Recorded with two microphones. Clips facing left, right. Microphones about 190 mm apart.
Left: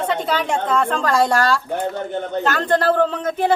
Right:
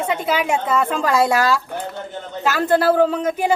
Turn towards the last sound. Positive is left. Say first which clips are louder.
# right 1 dB
turn(degrees=-10)  # may be behind; listen again after turning